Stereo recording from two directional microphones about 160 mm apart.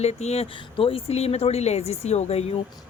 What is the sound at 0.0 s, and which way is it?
Speech, 40° left (ahead or behind).